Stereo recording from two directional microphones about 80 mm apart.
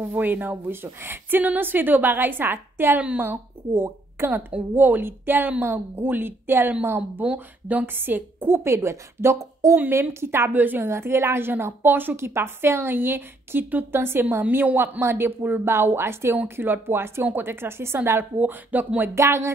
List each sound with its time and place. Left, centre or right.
0.0 s a woman's voice: right
3.0 s a woman's voice: centre
3.3 s a woman's voice: right
9.8 s a woman's voice: right
18.4 s a woman's voice: right
19.1 s speech: right